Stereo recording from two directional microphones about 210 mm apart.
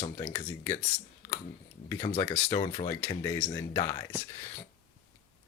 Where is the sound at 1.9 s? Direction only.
15° left (ahead or behind).